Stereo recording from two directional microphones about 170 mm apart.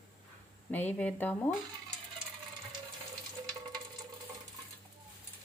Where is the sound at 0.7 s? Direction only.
10° left (ahead or behind).